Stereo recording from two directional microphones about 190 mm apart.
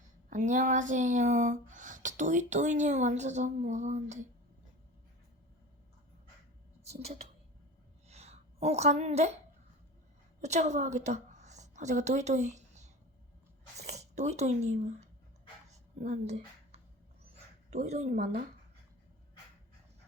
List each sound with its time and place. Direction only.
0.3 s speech: 40° right (ahead or behind)
6.9 s speech: 35° right (ahead or behind)
8.0 s a sound: 35° right (ahead or behind)
10.4 s a woman's voice: 35° right (ahead or behind)
15.7 s a sound: 40° right (ahead or behind)
17.7 s speech: 35° right (ahead or behind)